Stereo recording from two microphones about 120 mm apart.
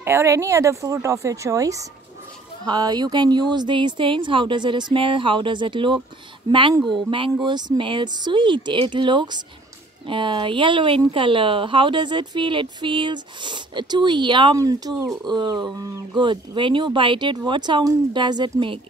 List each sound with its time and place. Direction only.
0.0 s a woman's voice: 20° right (ahead or behind); by 14.6 s 40° right (ahead or behind)
14.6 s a woman's voice: 30° right (ahead or behind)